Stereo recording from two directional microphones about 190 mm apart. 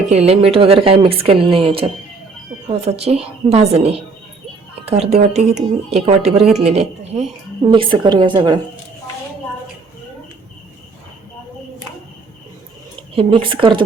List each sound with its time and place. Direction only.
0.1 s a woman's voice: 35° right (ahead or behind)
13.1 s speech: 25° right (ahead or behind)